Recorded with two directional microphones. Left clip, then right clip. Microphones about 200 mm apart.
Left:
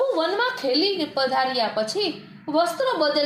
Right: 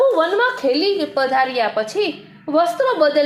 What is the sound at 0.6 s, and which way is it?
Speech, 20° right (ahead or behind).